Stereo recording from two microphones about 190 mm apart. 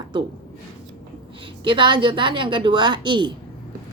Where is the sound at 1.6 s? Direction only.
25° right (ahead or behind).